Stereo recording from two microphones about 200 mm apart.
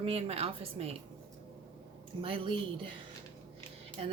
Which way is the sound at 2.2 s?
25° right (ahead or behind).